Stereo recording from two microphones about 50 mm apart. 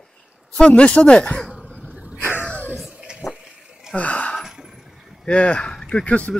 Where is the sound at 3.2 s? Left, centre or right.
Centre.